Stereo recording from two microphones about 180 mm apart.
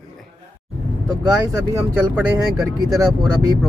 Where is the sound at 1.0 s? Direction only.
20° right (ahead or behind).